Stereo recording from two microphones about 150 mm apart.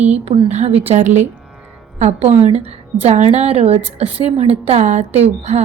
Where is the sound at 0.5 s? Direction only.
45° right (ahead or behind).